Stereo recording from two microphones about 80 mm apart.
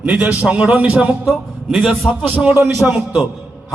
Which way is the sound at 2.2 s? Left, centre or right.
Centre.